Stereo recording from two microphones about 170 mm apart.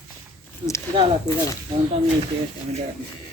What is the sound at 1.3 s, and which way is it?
Speech, 15° left (ahead or behind).